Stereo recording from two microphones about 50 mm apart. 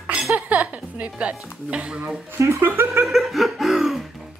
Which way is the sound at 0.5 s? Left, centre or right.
Right.